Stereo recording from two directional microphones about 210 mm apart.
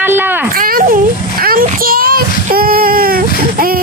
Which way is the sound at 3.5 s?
45° right (ahead or behind).